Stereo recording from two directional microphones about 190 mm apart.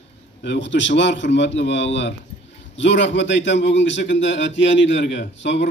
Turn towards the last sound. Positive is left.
turn(degrees=70)  # may be behind; listen again after turning